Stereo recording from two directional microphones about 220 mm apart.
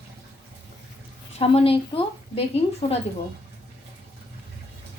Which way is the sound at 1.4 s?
25° left (ahead or behind).